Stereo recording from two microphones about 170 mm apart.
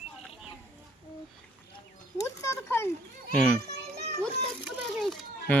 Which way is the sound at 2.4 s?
15° left (ahead or behind).